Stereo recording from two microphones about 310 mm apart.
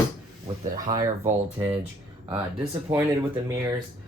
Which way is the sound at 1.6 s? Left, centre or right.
Centre.